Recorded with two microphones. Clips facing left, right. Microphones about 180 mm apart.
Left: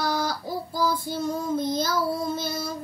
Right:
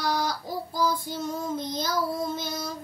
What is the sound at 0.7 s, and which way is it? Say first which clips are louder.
Child singing: left 1 dB; 15° right (ahead or behind).